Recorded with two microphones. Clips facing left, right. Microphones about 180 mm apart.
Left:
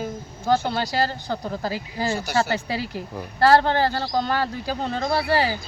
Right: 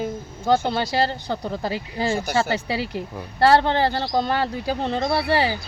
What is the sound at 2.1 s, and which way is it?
Speech, 50° right (ahead or behind).